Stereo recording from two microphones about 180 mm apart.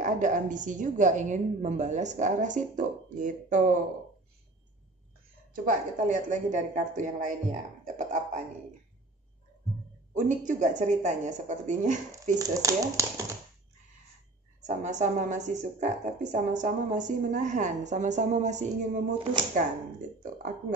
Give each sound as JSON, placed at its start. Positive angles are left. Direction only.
{"t": 0.0, "sound": "a woman's voice", "side_deg": -45}
{"t": 5.5, "sound": "a woman's voice", "side_deg": -50}
{"t": 7.8, "sound": "beatboxing", "side_deg": -45}
{"t": 10.1, "sound": "a woman's voice", "side_deg": -45}
{"t": 12.4, "sound": "speech", "side_deg": -20}
{"t": 14.8, "sound": "a woman's voice", "side_deg": -45}